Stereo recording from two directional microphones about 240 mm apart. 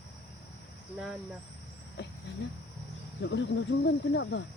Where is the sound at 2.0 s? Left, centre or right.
Left.